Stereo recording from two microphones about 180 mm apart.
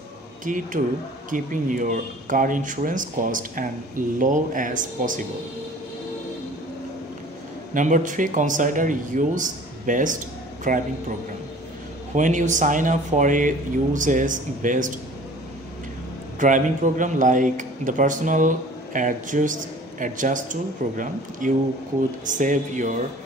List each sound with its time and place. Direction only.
0.5 s a man's voice: 45° right (ahead or behind)
7.7 s a man's voice: 45° right (ahead or behind)
12.2 s a man's voice: 45° right (ahead or behind)
16.3 s a man's voice: 45° right (ahead or behind)